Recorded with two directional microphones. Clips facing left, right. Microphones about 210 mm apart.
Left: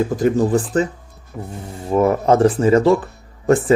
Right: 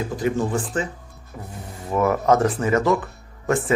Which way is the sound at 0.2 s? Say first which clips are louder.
Left 5 dB; 40° left (ahead or behind).